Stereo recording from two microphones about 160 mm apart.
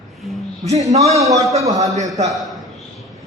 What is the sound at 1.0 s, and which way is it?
Speech, 20° right (ahead or behind).